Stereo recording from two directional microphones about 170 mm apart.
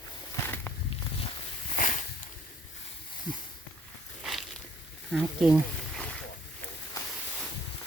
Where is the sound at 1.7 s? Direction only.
45° left (ahead or behind).